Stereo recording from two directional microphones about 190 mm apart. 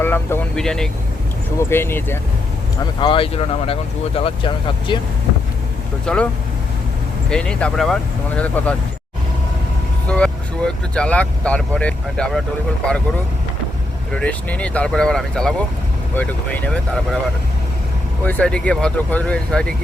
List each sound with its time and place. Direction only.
0.0 s speech: 10° left (ahead or behind)
3.0 s speech: 30° left (ahead or behind)
6.1 s speech: 5° left (ahead or behind)
7.3 s speech: 5° left (ahead or behind)
10.1 s speech: 5° left (ahead or behind)
14.1 s speech: 5° left (ahead or behind)
18.3 s speech: 5° left (ahead or behind)